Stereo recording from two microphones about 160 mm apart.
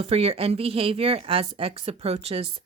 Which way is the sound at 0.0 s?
40° right (ahead or behind).